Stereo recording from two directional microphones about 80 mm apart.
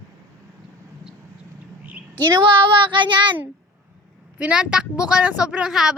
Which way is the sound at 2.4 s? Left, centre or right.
Right.